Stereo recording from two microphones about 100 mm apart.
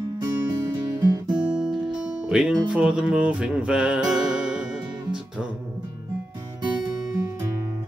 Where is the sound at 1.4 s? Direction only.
5° right (ahead or behind).